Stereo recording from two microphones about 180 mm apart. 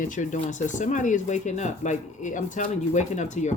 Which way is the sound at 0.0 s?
45° left (ahead or behind).